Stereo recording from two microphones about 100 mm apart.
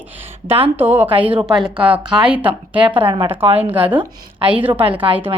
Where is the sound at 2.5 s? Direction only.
55° right (ahead or behind).